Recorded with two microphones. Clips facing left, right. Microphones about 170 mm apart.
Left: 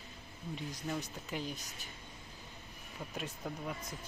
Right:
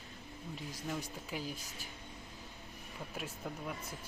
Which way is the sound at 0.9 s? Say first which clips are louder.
Even; 5° right (ahead or behind).